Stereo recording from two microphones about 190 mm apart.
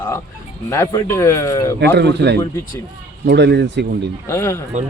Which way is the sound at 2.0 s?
65° right (ahead or behind).